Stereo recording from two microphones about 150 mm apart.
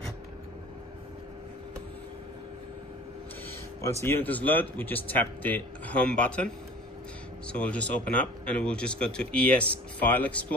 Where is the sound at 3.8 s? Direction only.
20° left (ahead or behind).